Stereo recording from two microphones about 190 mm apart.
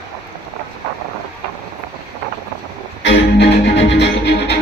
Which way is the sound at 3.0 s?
65° left (ahead or behind).